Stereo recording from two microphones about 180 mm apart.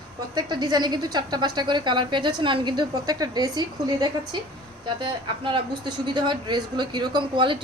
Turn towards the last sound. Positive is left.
turn(degrees=-25)  # may be behind; listen again after turning